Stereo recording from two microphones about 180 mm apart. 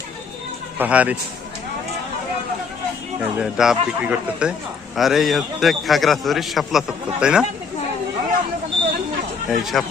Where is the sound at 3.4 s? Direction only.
5° right (ahead or behind).